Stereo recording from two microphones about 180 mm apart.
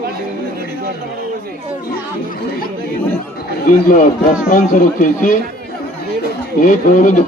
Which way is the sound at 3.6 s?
45° left (ahead or behind).